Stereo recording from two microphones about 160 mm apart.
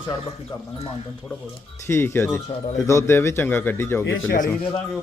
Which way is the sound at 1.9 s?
15° left (ahead or behind).